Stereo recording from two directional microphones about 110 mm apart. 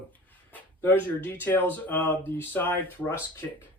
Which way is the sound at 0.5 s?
20° left (ahead or behind).